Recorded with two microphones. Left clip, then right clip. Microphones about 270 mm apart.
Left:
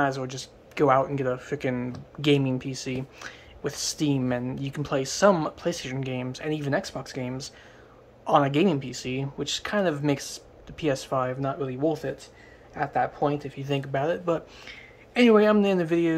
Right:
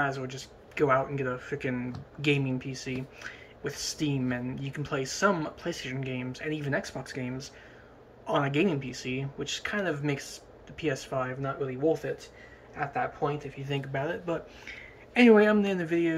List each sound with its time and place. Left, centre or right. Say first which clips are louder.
0.0 s speech: left 4 dB; centre